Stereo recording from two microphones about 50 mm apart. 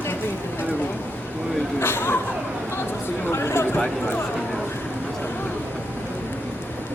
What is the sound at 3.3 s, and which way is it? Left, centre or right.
Speech, left.